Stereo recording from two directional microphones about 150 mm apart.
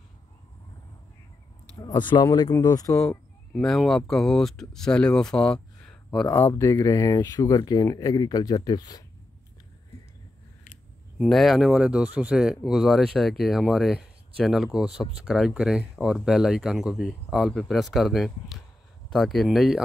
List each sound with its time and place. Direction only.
1.8 s speech: 30° left (ahead or behind)
3.1 s speech: centre (ahead or behind); by 9.0 s 25° left (ahead or behind)
11.1 s speech: centre (ahead or behind)